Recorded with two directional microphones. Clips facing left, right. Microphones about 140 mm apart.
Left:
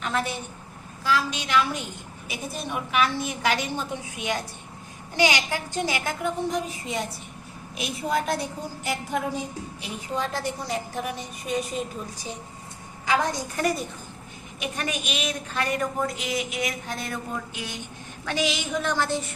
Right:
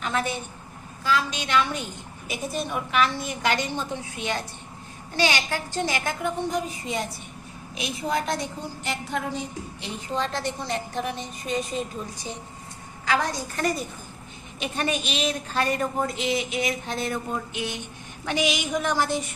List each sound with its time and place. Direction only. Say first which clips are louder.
0.0 s a woman's voice: right 1 dB; centre (ahead or behind)
14.6 s a woman's voice: right 3 dB; 30° right (ahead or behind); by 19.2 s 15° right (ahead or behind)